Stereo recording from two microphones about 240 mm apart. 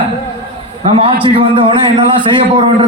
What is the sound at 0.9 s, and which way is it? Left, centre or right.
A man's voice, right.